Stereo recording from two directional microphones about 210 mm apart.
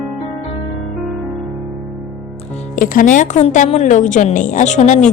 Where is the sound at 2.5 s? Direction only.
35° left (ahead or behind).